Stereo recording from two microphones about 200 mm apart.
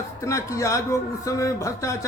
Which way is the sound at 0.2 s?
15° left (ahead or behind).